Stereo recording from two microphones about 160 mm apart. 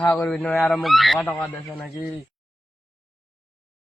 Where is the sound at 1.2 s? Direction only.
15° left (ahead or behind).